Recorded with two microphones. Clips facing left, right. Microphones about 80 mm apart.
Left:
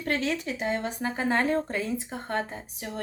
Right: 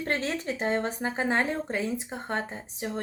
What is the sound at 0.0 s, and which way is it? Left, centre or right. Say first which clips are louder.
Speech: left 1 dB; right.